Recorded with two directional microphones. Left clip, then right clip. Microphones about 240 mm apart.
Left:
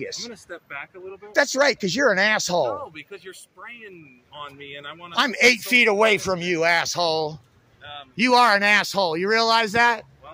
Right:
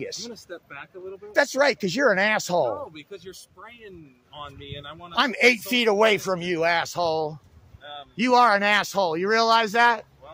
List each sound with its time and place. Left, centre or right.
0.0 s speech: centre
1.3 s speech: centre
5.1 s speech: centre